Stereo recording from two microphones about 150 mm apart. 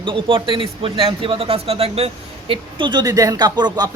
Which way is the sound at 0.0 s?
35° right (ahead or behind).